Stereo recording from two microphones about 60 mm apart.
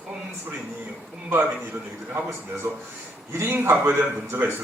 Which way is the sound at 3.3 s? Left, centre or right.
Right.